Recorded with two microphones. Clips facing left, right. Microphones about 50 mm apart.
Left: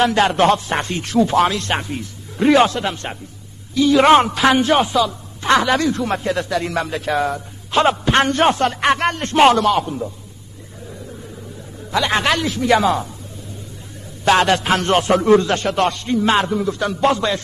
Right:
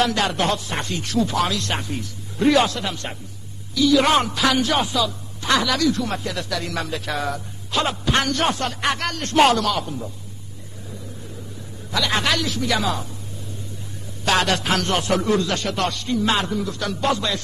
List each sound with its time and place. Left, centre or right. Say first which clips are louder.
0.0 s a man's voice: left 6 dB; left
1.8 s a man's voice: left 3 dB; left
7.2 s a man's voice: left 7 dB; centre
7.7 s a man's voice: left 6 dB; left
11.9 s speech: left 4 dB; left
14.2 s a man's voice: left 5 dB; left